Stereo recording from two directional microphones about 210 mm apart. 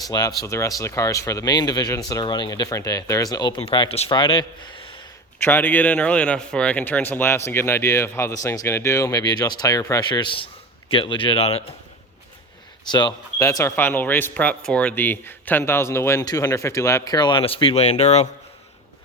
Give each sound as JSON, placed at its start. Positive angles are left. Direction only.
{"t": 0.1, "sound": "a man's voice", "side_deg": 20}
{"t": 5.4, "sound": "a man's voice", "side_deg": 10}
{"t": 12.9, "sound": "a man's voice", "side_deg": 20}